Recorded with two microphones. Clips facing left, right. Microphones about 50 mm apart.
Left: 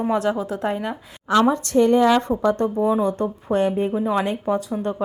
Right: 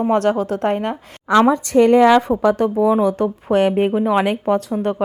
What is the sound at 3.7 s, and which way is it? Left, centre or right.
Speech, right.